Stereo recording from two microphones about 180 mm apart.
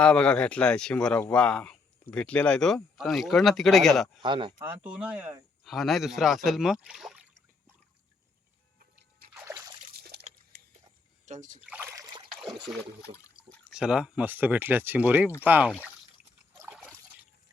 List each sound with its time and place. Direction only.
0.0 s speech: 5° left (ahead or behind)
4.2 s speech: 25° right (ahead or behind)
4.6 s speech: 5° right (ahead or behind)
9.3 s splash: 15° right (ahead or behind)
9.9 s liquid: 60° right (ahead or behind)
10.5 s mechanisms: 65° right (ahead or behind)
11.3 s speech: 45° right (ahead or behind)
11.6 s splash: 10° right (ahead or behind)
12.3 s trickle: centre (ahead or behind)
13.7 s speech: 5° right (ahead or behind)